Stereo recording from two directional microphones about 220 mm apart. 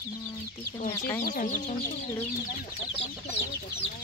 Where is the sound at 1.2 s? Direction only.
35° left (ahead or behind).